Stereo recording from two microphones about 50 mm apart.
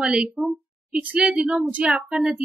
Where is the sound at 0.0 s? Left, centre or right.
Centre.